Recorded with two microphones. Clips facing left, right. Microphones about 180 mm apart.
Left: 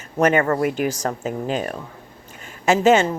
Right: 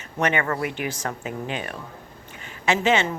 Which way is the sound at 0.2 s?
45° left (ahead or behind).